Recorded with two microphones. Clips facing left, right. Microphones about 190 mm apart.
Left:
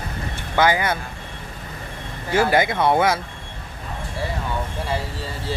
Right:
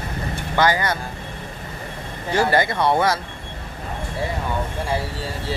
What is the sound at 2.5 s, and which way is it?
Speech, 15° left (ahead or behind).